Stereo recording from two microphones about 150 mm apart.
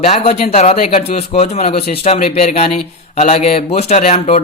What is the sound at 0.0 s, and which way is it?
Speech, 45° left (ahead or behind).